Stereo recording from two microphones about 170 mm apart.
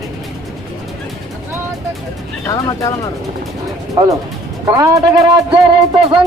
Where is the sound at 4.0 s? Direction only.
25° right (ahead or behind).